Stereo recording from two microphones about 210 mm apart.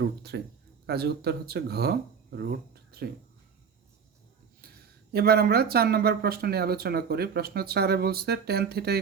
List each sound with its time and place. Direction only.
0.0 s speech: 50° right (ahead or behind)
2.9 s a sound: 50° right (ahead or behind)
5.1 s speech: 45° right (ahead or behind)